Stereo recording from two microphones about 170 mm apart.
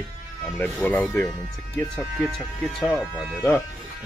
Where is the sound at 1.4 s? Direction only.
15° left (ahead or behind).